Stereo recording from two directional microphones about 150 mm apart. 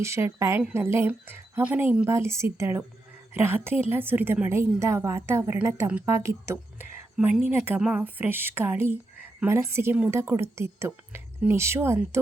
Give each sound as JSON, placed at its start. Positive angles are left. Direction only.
{"t": 0.0, "sound": "a woman's voice", "side_deg": -20}